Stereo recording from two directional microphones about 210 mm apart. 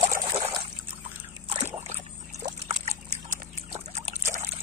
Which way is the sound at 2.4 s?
30° right (ahead or behind).